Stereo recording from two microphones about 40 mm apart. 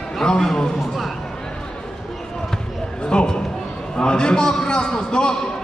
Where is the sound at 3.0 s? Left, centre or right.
Centre.